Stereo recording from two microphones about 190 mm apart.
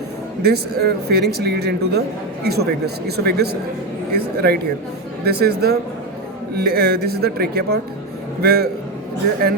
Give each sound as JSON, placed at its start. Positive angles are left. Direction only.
{"t": 0.4, "sound": "speech", "side_deg": -60}